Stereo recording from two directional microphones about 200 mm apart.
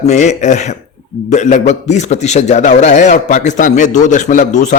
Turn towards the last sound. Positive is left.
turn(degrees=35)  # may be behind; listen again after turning